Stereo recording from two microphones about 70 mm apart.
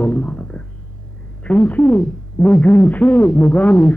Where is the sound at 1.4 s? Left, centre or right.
Left.